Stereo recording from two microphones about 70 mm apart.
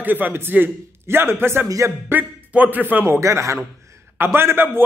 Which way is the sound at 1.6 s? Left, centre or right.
Right.